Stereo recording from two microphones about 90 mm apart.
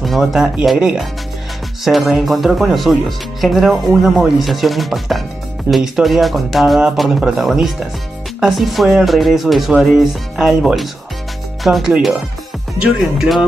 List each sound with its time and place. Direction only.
0.0 s speech: centre (ahead or behind)